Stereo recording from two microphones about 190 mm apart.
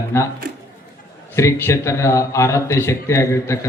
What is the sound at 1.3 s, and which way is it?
A man's voice, 15° left (ahead or behind).